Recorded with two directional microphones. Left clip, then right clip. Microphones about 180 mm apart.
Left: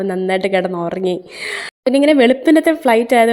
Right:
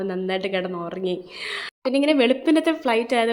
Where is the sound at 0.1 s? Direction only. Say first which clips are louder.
Left 9 dB; 35° left (ahead or behind).